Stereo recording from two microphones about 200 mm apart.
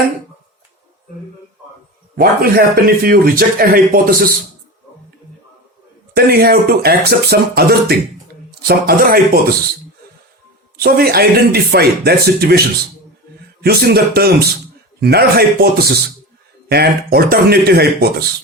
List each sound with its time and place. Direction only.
2.1 s speech: 45° right (ahead or behind)
6.1 s speech: 50° right (ahead or behind)
10.8 s speech: 50° right (ahead or behind)
16.6 s speech: 50° right (ahead or behind)